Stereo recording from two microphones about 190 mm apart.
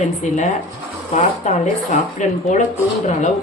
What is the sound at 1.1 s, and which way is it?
Speech, 35° left (ahead or behind).